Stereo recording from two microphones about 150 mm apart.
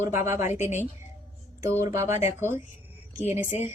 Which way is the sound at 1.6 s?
20° right (ahead or behind).